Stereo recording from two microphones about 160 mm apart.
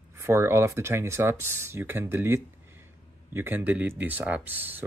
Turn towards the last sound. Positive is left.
turn(degrees=-10)  # may be behind; listen again after turning